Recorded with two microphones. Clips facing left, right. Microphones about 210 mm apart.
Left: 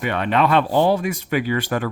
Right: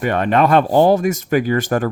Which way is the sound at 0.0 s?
45° right (ahead or behind).